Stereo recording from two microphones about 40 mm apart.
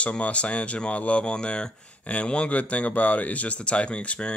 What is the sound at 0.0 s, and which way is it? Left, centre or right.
Speech, left.